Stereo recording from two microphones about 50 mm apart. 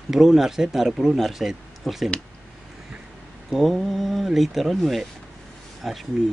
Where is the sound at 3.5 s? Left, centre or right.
Centre.